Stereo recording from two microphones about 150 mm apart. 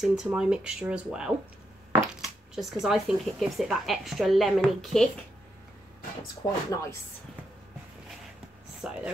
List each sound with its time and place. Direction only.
0.0 s speech: centre (ahead or behind)
2.5 s speech: 5° right (ahead or behind)
6.4 s speech: 20° left (ahead or behind)
8.8 s speech: 5° right (ahead or behind)